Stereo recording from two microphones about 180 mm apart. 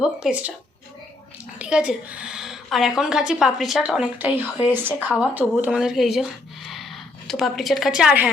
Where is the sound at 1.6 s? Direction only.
5° right (ahead or behind).